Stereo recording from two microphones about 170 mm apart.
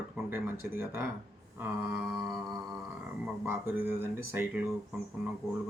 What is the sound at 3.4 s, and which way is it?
Speech, 10° right (ahead or behind).